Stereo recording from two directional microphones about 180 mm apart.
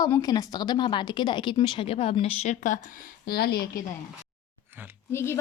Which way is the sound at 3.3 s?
60° left (ahead or behind).